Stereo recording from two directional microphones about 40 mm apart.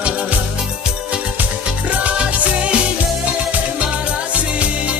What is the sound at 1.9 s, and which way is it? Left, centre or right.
Music, right.